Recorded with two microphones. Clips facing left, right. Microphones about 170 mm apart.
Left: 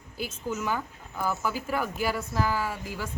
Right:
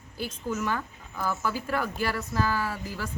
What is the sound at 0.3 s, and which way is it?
Speech, 10° left (ahead or behind).